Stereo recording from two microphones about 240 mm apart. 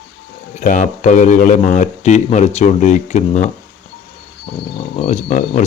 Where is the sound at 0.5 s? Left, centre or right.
Left.